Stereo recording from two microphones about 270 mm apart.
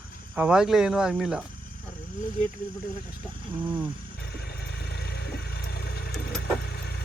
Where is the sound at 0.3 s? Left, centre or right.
Centre.